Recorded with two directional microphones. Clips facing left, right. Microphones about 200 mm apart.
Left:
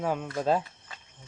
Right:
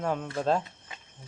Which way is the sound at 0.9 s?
20° right (ahead or behind).